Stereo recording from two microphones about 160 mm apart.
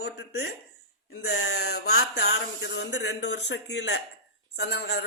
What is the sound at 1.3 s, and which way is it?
Speech, 90° left.